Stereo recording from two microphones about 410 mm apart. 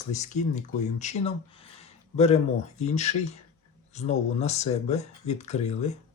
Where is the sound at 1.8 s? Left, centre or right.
Centre.